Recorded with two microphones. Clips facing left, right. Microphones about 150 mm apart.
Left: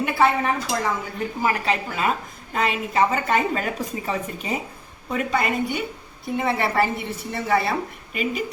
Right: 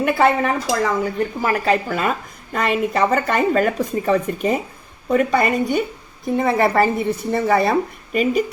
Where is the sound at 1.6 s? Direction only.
45° right (ahead or behind).